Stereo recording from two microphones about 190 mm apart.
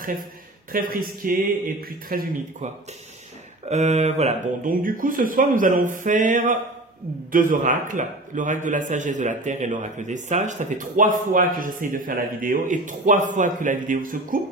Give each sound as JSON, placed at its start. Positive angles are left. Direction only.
{"t": 0.7, "sound": "a man's voice", "side_deg": -50}
{"t": 3.6, "sound": "a man's voice", "side_deg": -35}